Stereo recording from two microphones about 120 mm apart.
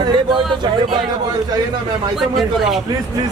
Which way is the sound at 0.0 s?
40° right (ahead or behind).